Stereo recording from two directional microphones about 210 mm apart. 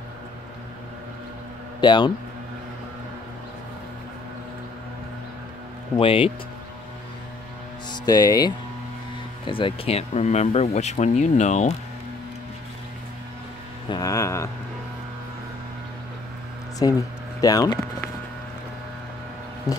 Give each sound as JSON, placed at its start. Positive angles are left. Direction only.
{"t": 1.8, "sound": "speech", "side_deg": 20}
{"t": 5.9, "sound": "speech", "side_deg": 25}
{"t": 7.9, "sound": "speech", "side_deg": 20}
{"t": 13.8, "sound": "speech", "side_deg": 15}
{"t": 16.8, "sound": "speech", "side_deg": 20}
{"t": 17.4, "sound": "a sound", "side_deg": 15}
{"t": 19.7, "sound": "a sound", "side_deg": 15}